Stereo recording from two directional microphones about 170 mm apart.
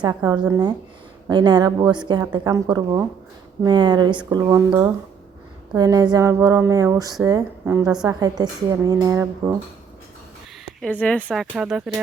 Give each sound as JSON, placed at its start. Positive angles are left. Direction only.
{"t": 0.2, "sound": "a woman's voice", "side_deg": -25}
{"t": 10.8, "sound": "speech", "side_deg": 5}
{"t": 11.5, "sound": "speech", "side_deg": -5}